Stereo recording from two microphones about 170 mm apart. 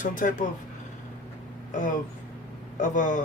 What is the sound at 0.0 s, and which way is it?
Speech, 50° left (ahead or behind).